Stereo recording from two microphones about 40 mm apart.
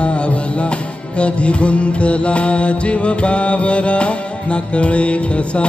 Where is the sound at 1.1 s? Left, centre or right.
Left.